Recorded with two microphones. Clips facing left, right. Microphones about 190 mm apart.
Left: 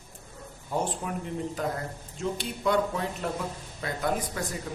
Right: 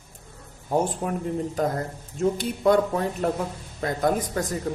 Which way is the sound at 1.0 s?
45° right (ahead or behind).